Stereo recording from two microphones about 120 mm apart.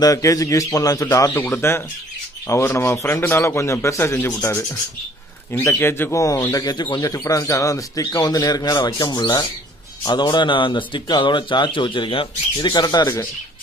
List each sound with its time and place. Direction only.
0.0 s speech: 30° left (ahead or behind); by 12.3 s 45° left (ahead or behind)
12.5 s speech: 35° left (ahead or behind)